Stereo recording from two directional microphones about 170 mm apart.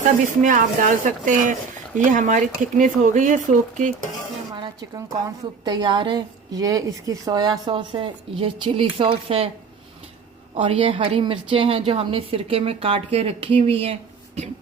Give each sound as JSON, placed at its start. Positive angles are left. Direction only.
{"t": 0.4, "sound": "speech", "side_deg": -50}
{"t": 4.5, "sound": "a woman's voice", "side_deg": -25}
{"t": 10.5, "sound": "a woman's voice", "side_deg": -30}